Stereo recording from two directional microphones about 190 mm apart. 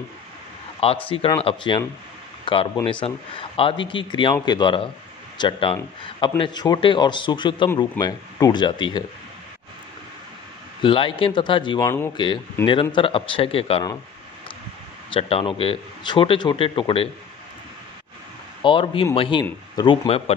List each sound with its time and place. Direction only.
0.7 s speech: 30° left (ahead or behind)
10.8 s speech: 25° left (ahead or behind)
15.0 s speech: 30° left (ahead or behind)
18.6 s speech: 25° left (ahead or behind)